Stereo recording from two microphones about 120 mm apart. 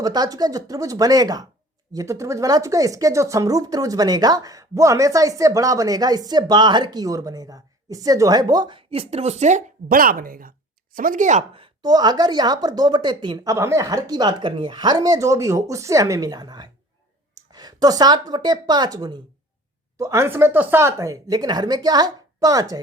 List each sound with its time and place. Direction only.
0.0 s speech: 35° right (ahead or behind)
8.9 s speech: 55° right (ahead or behind); by 9.7 s 90° right
11.1 s speech: 90° right
11.8 s speech: 35° right (ahead or behind)